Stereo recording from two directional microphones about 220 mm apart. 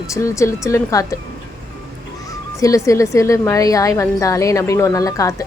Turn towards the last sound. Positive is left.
turn(degrees=15)  # may be behind; listen again after turning